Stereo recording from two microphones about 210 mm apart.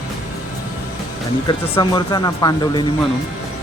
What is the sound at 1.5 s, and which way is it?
Speech, 20° left (ahead or behind).